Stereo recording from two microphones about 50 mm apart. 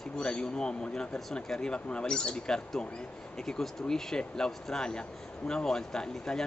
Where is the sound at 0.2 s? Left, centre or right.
Centre.